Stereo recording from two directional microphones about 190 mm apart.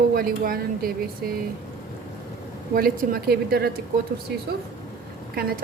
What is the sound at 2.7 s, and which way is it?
Speech, 55° right (ahead or behind).